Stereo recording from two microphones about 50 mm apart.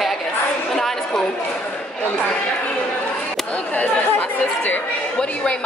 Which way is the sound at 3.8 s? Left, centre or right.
Left.